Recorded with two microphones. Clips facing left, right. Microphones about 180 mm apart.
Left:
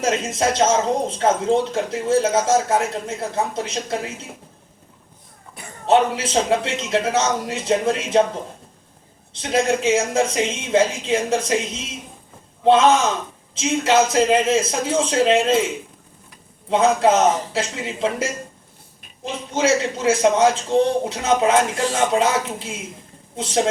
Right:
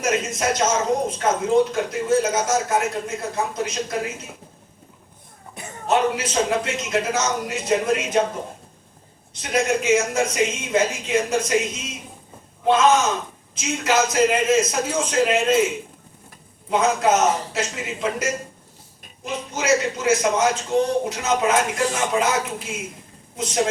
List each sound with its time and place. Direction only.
0.0 s a man's voice: 30° left (ahead or behind)
5.8 s a man's voice: 30° left (ahead or behind)
9.3 s a man's voice: 30° left (ahead or behind)
16.6 s a man's voice: 30° left (ahead or behind)